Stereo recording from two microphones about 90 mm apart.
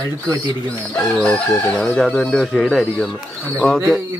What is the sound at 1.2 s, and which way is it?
Chicken, 15° left (ahead or behind).